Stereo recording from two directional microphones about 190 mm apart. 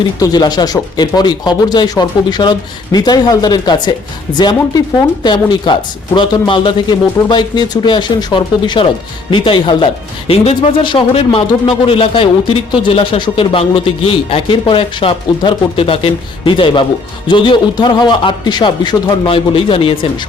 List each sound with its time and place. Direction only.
0.2 s speech: 20° left (ahead or behind)
5.2 s speech: 25° left (ahead or behind)